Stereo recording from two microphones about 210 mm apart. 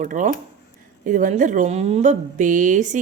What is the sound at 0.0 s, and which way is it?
Speech, 35° right (ahead or behind).